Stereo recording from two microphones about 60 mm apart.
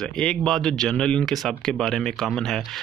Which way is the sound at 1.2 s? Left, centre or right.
Centre.